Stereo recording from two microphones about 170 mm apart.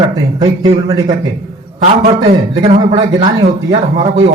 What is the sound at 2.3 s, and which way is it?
Speech, 35° right (ahead or behind).